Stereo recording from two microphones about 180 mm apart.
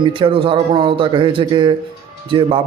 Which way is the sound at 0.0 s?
25° right (ahead or behind).